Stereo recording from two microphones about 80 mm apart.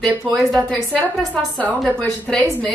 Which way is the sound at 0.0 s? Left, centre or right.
Centre.